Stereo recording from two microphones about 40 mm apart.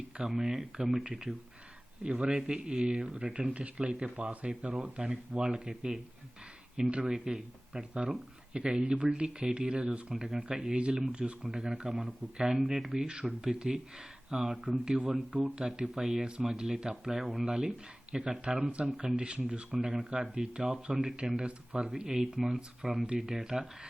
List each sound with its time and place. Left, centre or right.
0.3 s speech: centre
7.0 s speech: centre
10.2 s speech: centre
10.6 s speech: right
11.4 s speech: centre
17.4 s speech: right